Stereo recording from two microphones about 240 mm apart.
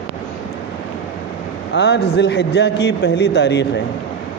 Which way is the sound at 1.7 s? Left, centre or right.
Left.